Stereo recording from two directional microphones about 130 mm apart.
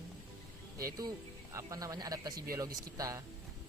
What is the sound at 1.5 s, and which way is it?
Speech, 30° right (ahead or behind).